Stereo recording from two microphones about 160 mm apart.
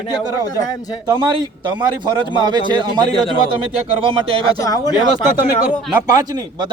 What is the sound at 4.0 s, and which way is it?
Speech, 35° right (ahead or behind).